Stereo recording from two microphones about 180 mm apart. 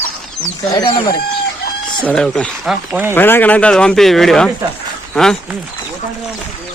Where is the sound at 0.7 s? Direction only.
25° left (ahead or behind).